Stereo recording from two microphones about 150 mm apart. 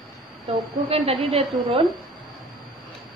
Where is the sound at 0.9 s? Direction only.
40° right (ahead or behind).